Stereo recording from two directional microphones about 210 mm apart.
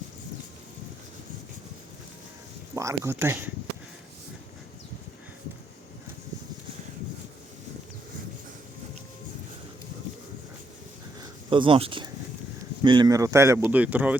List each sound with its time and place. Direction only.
2.7 s speech: 15° right (ahead or behind)
11.2 s a sound: 25° right (ahead or behind)
12.8 s speech: 20° right (ahead or behind)